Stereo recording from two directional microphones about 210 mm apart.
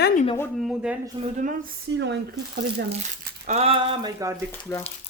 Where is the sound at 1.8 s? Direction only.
55° right (ahead or behind).